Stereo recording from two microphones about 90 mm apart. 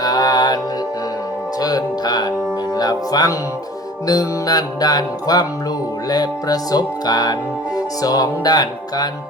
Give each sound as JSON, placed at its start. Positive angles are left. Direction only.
{"t": 0.0, "sound": "music", "side_deg": 50}
{"t": 1.6, "sound": "music", "side_deg": 50}